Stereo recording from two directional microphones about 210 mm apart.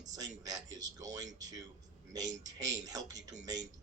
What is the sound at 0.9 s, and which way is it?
Speech, 15° right (ahead or behind).